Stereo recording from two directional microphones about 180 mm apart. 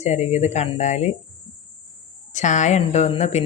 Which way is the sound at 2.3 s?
40° left (ahead or behind).